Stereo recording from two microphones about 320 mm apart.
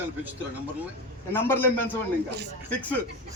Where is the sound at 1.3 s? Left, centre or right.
Centre.